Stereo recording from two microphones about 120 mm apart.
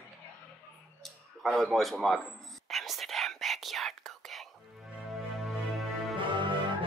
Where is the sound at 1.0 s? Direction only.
Centre (ahead or behind).